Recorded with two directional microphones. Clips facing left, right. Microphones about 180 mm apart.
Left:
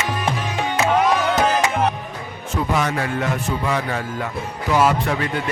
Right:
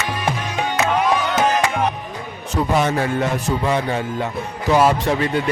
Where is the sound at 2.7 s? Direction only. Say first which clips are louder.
Right 4 dB; 25° right (ahead or behind).